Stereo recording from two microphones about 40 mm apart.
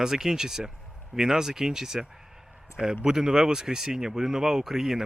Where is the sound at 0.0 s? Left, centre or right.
Centre.